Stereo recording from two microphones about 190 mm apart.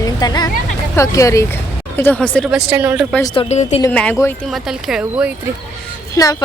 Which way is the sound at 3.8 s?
5° left (ahead or behind).